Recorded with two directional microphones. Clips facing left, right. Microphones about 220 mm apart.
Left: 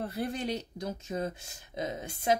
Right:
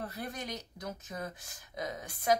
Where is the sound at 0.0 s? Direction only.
30° left (ahead or behind).